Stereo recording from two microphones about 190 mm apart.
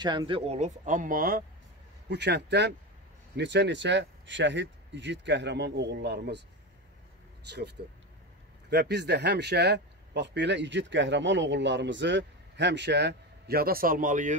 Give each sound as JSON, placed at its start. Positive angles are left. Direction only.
{"t": 0.0, "sound": "speech", "side_deg": -25}
{"t": 2.0, "sound": "speech", "side_deg": -60}
{"t": 7.4, "sound": "speech", "side_deg": -60}